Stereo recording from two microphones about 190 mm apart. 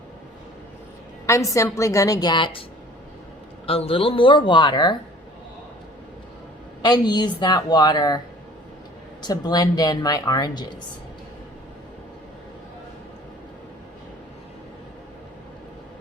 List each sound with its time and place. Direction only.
1.3 s a woman's voice: 15° left (ahead or behind)
3.7 s speech: 30° left (ahead or behind)
6.8 s speech: 20° left (ahead or behind)
9.2 s speech: 20° left (ahead or behind)